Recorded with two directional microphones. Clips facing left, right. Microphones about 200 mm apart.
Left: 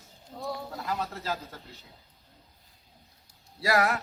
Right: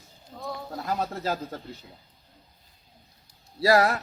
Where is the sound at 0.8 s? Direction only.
40° right (ahead or behind).